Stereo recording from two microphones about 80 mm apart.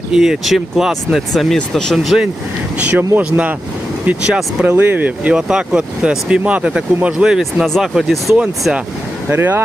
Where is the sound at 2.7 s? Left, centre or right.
Centre.